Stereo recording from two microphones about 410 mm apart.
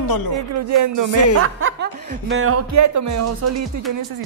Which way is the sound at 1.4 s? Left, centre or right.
Right.